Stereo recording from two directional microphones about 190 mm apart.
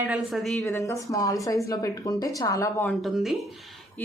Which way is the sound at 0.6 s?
15° left (ahead or behind).